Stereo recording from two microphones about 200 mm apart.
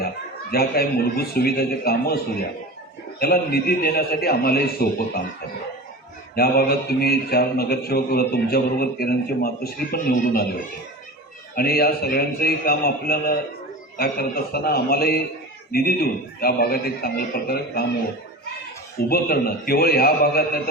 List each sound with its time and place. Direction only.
0.5 s a man's voice: 50° left (ahead or behind)
3.2 s a man's voice: 50° left (ahead or behind)
6.3 s a man's voice: 50° left (ahead or behind)
11.5 s a man's voice: 50° left (ahead or behind)
19.0 s a man's voice: 50° left (ahead or behind)